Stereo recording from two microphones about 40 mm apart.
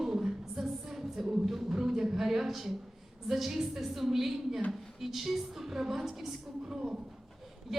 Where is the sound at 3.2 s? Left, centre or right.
Centre.